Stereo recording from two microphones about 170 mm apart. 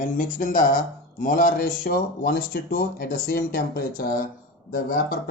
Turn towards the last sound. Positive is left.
turn(degrees=55)  # may be behind; listen again after turning